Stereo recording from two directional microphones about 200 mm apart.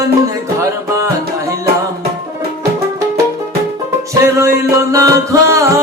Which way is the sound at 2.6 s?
15° right (ahead or behind).